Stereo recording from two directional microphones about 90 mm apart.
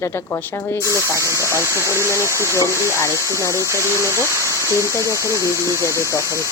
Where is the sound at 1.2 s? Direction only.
35° right (ahead or behind).